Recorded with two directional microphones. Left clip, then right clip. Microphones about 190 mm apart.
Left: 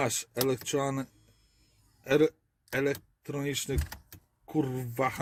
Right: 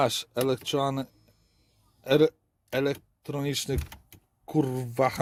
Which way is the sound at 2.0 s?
30° right (ahead or behind).